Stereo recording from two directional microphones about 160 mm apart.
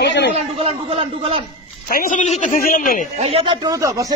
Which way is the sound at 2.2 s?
50° left (ahead or behind).